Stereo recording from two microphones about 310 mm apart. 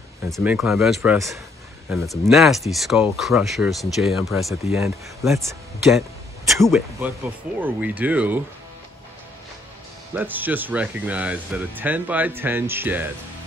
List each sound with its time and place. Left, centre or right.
0.3 s speech: centre
10.1 s speech: centre